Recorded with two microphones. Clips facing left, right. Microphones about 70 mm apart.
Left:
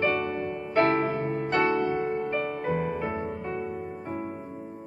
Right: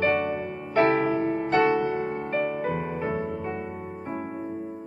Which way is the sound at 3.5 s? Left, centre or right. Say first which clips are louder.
Left 1 dB; right.